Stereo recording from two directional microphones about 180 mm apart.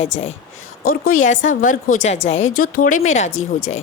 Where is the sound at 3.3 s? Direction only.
90° left.